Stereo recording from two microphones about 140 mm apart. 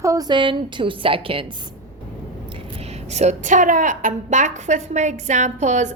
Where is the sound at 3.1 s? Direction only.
55° right (ahead or behind).